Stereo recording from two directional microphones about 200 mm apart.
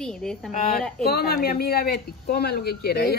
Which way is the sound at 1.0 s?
50° left (ahead or behind).